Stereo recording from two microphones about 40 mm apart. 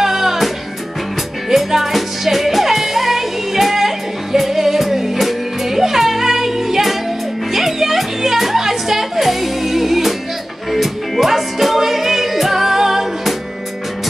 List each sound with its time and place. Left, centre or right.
0.0 s music: centre
1.5 s music: centre